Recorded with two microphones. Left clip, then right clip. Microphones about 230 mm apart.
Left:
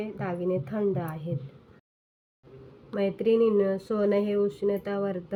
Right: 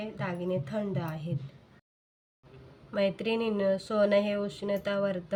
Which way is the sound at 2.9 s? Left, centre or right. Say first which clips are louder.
Left 4 dB; right.